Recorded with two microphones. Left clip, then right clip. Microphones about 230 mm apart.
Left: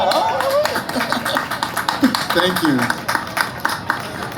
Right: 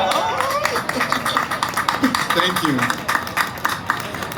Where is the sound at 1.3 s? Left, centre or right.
Right.